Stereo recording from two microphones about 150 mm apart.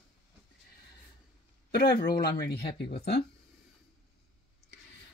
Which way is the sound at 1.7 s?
85° left.